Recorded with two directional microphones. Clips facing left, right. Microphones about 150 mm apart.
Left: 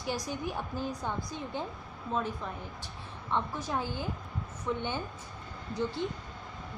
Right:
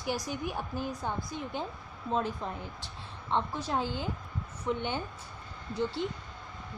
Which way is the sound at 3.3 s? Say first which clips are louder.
Right 2 dB; 20° right (ahead or behind).